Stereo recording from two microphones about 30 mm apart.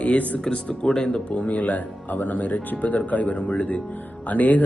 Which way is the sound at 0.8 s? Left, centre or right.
Left.